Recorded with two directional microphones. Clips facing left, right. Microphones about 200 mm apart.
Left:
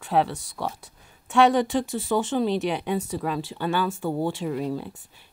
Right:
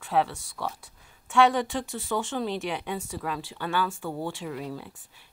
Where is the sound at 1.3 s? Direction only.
20° left (ahead or behind).